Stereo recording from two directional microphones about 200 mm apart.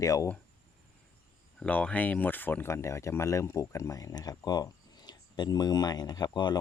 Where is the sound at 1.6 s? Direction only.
5° left (ahead or behind).